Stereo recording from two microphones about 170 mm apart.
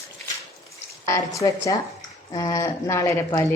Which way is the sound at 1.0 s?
15° left (ahead or behind).